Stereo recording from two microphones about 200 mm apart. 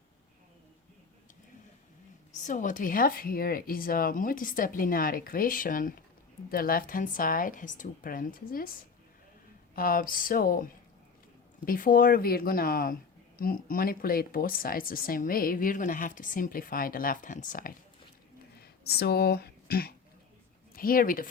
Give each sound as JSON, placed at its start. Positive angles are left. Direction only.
{"t": 2.3, "sound": "speech", "side_deg": 40}
{"t": 18.6, "sound": "speech", "side_deg": 50}